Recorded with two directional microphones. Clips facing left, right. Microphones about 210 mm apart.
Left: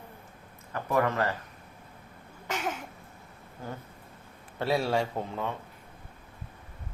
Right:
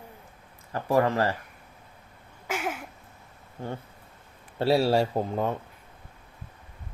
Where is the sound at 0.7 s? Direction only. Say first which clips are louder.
Right 4 dB; 30° right (ahead or behind).